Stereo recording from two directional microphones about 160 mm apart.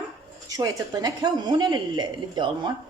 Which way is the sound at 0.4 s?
25° right (ahead or behind).